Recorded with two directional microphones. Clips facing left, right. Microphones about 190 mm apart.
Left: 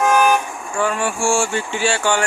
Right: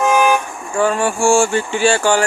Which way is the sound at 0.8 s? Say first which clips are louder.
Right 5 dB; 40° right (ahead or behind).